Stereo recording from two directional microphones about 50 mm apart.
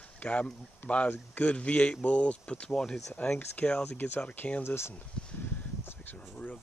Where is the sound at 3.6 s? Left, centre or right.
Left.